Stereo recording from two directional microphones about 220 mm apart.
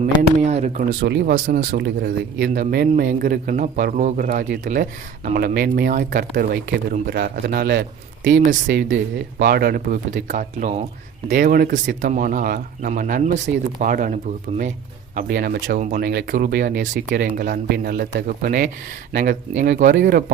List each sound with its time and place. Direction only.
0.2 s speech: 35° right (ahead or behind)
1.0 s speech: 50° right (ahead or behind)
9.4 s speech: 45° right (ahead or behind)
20.0 s speech: 50° right (ahead or behind)